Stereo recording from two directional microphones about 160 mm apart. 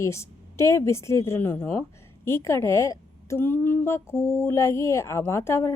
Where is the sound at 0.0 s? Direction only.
20° left (ahead or behind).